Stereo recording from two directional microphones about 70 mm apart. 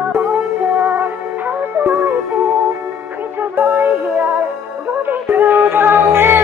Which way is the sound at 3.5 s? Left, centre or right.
Right.